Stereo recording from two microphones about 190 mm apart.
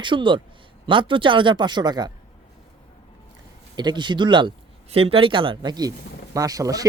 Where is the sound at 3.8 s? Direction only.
25° right (ahead or behind).